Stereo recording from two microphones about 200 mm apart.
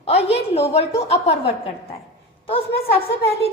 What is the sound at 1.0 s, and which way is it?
Speech, 30° left (ahead or behind).